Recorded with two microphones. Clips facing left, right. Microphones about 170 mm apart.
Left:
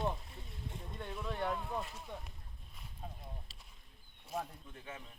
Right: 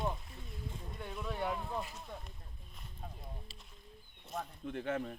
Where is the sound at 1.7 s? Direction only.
5° right (ahead or behind).